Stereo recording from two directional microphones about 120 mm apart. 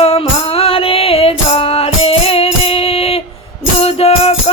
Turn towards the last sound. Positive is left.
turn(degrees=60)  # may be behind; listen again after turning